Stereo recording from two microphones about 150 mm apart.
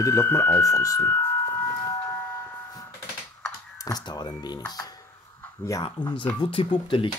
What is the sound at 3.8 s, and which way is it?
Speech, 25° left (ahead or behind).